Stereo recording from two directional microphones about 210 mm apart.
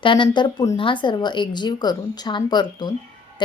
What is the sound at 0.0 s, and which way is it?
Speech, 25° left (ahead or behind).